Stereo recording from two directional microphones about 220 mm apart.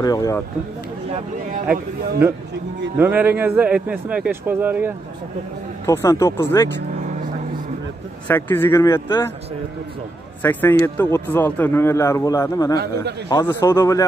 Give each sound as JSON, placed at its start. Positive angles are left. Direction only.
{"t": 0.0, "sound": "a man's voice", "side_deg": 15}
{"t": 3.0, "sound": "a man's voice", "side_deg": -5}
{"t": 5.9, "sound": "a man's voice", "side_deg": 15}
{"t": 8.3, "sound": "a man's voice", "side_deg": 10}
{"t": 10.4, "sound": "a man's voice", "side_deg": 10}